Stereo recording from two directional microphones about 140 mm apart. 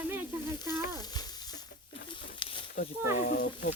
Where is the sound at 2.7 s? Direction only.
90° left.